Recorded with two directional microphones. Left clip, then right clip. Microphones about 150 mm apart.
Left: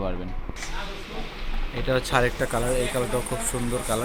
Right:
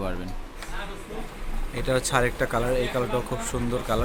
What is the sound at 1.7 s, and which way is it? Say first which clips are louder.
Speech: left 1 dB; 10° right (ahead or behind).